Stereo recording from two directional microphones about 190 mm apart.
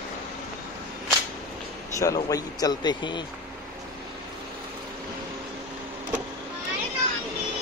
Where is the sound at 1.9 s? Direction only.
15° left (ahead or behind).